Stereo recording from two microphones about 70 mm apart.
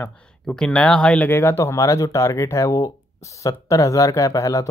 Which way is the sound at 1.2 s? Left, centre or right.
Left.